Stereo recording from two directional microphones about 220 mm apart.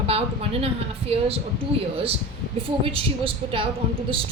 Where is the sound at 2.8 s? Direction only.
25° right (ahead or behind).